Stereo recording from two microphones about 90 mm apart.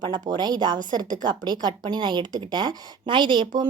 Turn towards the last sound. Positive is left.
turn(degrees=-60)  # may be behind; listen again after turning